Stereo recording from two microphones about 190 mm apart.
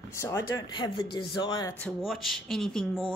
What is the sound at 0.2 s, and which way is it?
Speech, 15° left (ahead or behind).